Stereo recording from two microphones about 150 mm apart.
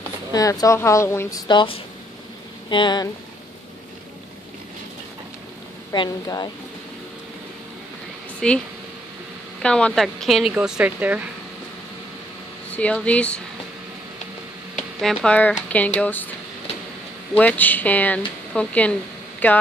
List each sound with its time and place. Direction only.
0.3 s a woman's voice: 25° left (ahead or behind)
1.5 s speech: 30° left (ahead or behind)
5.9 s a woman's voice: 25° left (ahead or behind)
8.4 s speech: 5° left (ahead or behind); by 11.2 s 10° right (ahead or behind)
12.7 s speech: 10° left (ahead or behind)
15.0 s speech: 5° left (ahead or behind)
17.4 s speech: 10° left (ahead or behind)